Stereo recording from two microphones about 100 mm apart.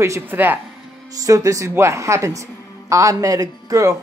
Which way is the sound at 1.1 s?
35° right (ahead or behind).